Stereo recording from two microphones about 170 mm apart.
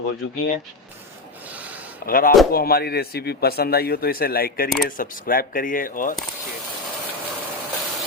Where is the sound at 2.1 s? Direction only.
60° left (ahead or behind).